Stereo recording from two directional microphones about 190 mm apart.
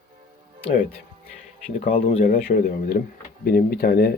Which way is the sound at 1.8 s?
30° left (ahead or behind).